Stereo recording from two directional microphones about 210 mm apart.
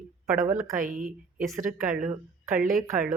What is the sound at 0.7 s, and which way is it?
Speech, 40° right (ahead or behind).